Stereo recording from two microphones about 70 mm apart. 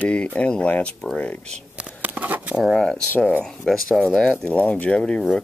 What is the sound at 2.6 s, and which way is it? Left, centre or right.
Speech, centre.